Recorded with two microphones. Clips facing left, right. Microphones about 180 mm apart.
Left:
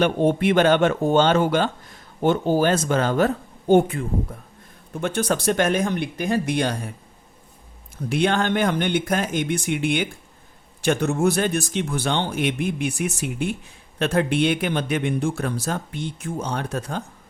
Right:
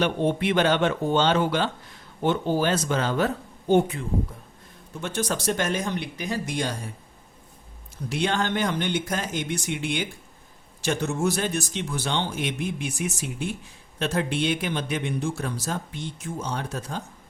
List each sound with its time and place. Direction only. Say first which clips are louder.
0.0 s speech: left 4 dB; 45° left (ahead or behind); by 6.9 s 60° left (ahead or behind)
8.1 s speech: left 5 dB; 55° left (ahead or behind)